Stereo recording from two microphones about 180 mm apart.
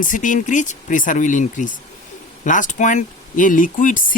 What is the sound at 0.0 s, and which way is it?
Speech, 45° left (ahead or behind).